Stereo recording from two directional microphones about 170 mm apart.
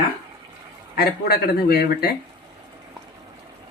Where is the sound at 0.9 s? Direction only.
70° left (ahead or behind).